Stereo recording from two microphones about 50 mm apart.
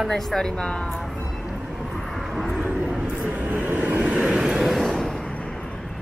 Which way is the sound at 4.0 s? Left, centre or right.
Centre.